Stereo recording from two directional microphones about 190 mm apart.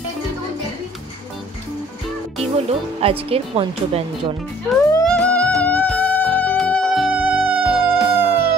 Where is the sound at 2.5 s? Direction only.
30° right (ahead or behind).